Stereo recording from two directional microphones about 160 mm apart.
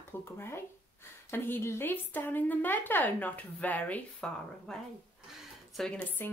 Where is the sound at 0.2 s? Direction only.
15° left (ahead or behind).